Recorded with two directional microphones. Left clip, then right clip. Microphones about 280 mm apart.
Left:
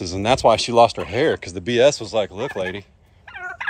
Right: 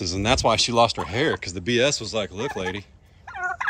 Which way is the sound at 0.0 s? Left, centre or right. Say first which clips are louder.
Left 4 dB; centre.